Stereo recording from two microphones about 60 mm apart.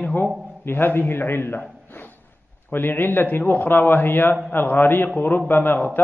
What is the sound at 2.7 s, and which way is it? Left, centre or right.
A man's voice, left.